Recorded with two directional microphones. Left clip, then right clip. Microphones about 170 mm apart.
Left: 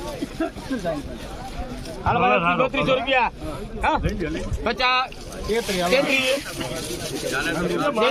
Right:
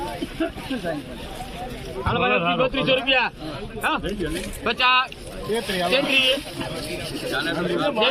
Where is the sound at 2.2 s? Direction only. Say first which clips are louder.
Left 2 dB; 20° left (ahead or behind).